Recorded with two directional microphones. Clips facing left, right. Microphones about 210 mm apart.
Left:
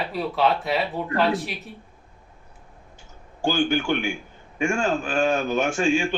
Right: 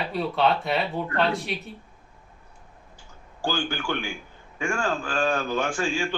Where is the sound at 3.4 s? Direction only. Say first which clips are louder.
Left 6 dB; 20° left (ahead or behind).